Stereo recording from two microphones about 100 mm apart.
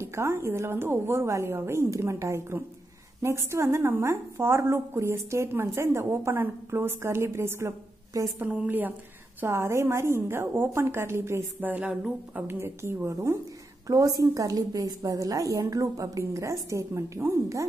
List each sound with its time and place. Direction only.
0.0 s a woman's voice: 25° right (ahead or behind)
8.4 s a woman's voice: 15° right (ahead or behind)
11.7 s speech: 10° right (ahead or behind)
12.4 s a woman's voice: 25° right (ahead or behind)